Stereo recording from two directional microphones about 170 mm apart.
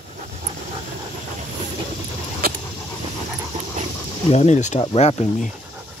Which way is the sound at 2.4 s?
60° right (ahead or behind).